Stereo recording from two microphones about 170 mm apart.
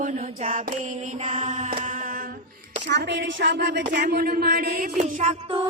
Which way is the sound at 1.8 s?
50° right (ahead or behind).